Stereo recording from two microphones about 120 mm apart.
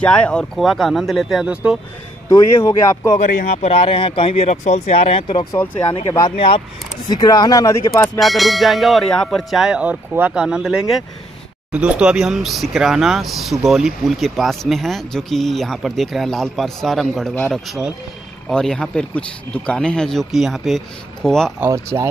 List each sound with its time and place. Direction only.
0.0 s speech: 10° left (ahead or behind); by 1.8 s 5° right (ahead or behind)
2.3 s speech: 25° left (ahead or behind)
3.2 s speech: 75° left (ahead or behind); by 4.6 s 55° left (ahead or behind)
4.6 s speech: 65° left (ahead or behind)
6.0 s speech: 30° left (ahead or behind)
8.2 s speech: centre (ahead or behind)
21.5 s speech: 25° right (ahead or behind)